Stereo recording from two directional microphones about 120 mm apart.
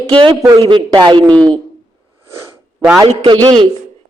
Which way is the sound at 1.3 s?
10° left (ahead or behind).